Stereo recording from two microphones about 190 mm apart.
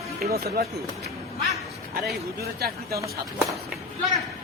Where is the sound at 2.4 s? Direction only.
55° right (ahead or behind).